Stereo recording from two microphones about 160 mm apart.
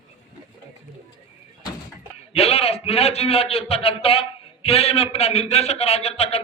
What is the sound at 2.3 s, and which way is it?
A man's voice, 40° left (ahead or behind).